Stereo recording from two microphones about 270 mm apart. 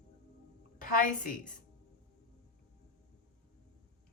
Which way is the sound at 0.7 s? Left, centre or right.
Left.